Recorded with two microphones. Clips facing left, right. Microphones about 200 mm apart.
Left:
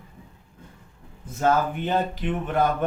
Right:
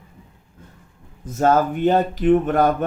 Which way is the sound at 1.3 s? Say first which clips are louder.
Right 5 dB; 45° right (ahead or behind).